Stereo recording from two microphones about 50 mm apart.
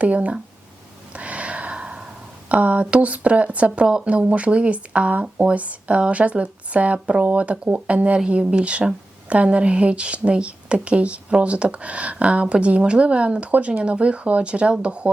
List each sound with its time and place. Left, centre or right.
0.0 s speech: right
1.1 s gasp: right
2.5 s speech: right
3.8 s speech: centre
4.1 s a woman's voice: right